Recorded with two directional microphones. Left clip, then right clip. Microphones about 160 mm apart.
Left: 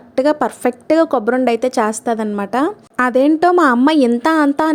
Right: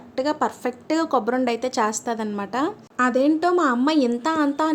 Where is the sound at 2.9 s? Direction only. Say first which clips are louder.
Left 6 dB; 55° left (ahead or behind).